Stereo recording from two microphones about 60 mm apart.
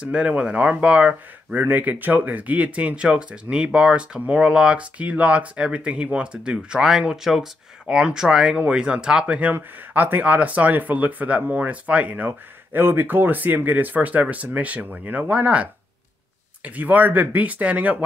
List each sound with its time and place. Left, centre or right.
0.0 s speech: centre
9.4 s speech: right
12.3 s speech: right